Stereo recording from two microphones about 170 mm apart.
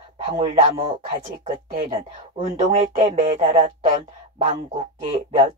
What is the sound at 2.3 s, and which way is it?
Speech, 30° right (ahead or behind).